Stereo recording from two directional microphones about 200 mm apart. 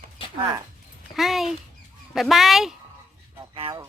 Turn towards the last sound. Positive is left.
turn(degrees=-25)  # may be behind; listen again after turning